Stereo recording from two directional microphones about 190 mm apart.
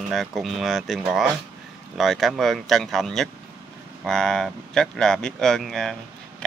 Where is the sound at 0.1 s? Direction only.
Centre (ahead or behind).